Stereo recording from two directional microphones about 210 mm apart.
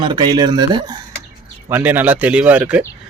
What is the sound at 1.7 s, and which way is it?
Speech, 10° right (ahead or behind).